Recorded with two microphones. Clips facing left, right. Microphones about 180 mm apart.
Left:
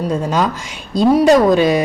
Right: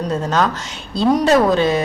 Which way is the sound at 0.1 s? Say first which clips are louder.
Right 1 dB; 10° left (ahead or behind).